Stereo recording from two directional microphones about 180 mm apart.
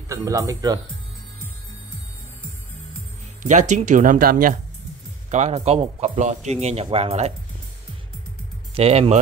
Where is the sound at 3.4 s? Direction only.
40° right (ahead or behind).